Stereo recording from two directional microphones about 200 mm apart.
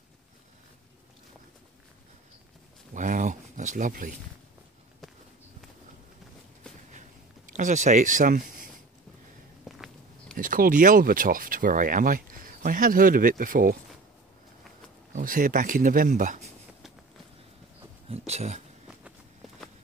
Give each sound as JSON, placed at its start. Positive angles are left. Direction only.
{"t": 2.9, "sound": "speech", "side_deg": -40}
{"t": 7.5, "sound": "speech", "side_deg": -40}
{"t": 9.7, "sound": "walk", "side_deg": 0}
{"t": 10.3, "sound": "speech", "side_deg": -45}
{"t": 15.1, "sound": "speech", "side_deg": -45}
{"t": 18.1, "sound": "a sound", "side_deg": -30}